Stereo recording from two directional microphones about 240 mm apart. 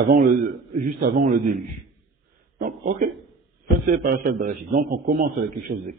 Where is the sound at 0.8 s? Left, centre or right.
Right.